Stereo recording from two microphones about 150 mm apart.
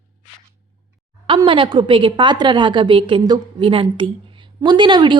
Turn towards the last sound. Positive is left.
turn(degrees=-30)  # may be behind; listen again after turning